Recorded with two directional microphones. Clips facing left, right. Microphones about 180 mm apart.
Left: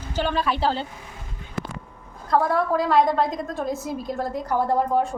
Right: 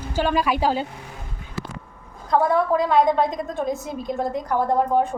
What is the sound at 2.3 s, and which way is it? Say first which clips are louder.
A woman's voice: right 2 dB; centre (ahead or behind).